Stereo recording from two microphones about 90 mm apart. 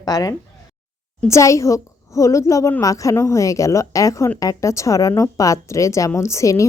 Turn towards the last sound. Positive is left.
turn(degrees=35)  # may be behind; listen again after turning